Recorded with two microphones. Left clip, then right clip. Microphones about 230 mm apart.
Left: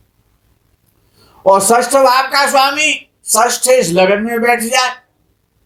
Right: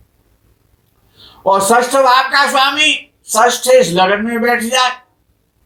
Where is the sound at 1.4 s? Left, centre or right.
Left.